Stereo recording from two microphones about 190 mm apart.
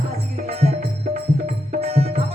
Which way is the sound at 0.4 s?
30° right (ahead or behind).